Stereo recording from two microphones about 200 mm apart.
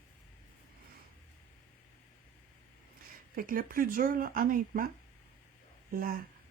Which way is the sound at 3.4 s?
45° right (ahead or behind).